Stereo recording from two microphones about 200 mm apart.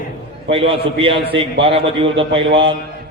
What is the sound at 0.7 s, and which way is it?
A man's voice, 25° right (ahead or behind).